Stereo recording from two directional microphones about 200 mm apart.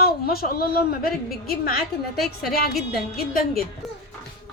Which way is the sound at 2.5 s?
50° left (ahead or behind).